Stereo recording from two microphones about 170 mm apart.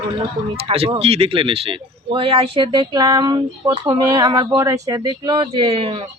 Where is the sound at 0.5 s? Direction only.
35° right (ahead or behind).